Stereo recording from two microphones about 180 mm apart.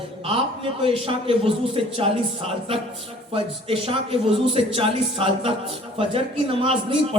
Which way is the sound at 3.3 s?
30° right (ahead or behind).